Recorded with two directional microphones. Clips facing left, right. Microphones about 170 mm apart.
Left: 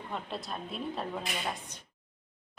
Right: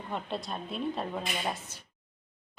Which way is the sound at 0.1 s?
Centre (ahead or behind).